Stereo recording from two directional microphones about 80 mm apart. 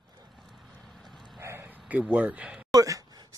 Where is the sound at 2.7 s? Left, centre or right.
Right.